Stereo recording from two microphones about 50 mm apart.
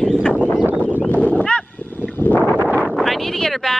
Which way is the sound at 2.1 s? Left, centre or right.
Left.